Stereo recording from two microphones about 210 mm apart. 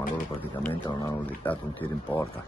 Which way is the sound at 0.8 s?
15° left (ahead or behind).